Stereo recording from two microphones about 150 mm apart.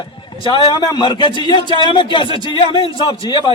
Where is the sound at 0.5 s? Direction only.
30° left (ahead or behind).